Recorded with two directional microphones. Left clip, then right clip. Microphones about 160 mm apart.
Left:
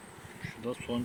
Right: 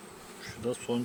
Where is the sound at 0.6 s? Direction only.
40° right (ahead or behind).